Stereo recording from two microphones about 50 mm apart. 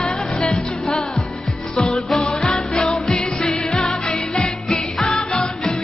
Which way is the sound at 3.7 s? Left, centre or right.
Centre.